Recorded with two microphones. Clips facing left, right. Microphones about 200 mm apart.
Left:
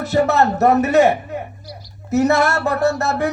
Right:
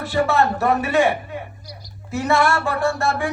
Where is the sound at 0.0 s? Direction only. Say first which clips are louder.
Left 3 dB; 40° left (ahead or behind).